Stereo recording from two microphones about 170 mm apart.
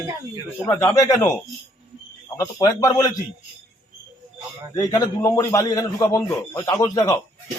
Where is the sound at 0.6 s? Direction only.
15° left (ahead or behind).